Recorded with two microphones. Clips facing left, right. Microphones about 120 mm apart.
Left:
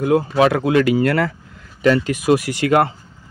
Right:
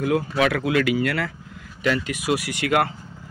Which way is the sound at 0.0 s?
30° left (ahead or behind).